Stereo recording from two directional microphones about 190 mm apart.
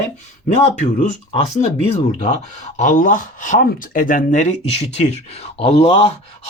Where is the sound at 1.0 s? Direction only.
35° left (ahead or behind).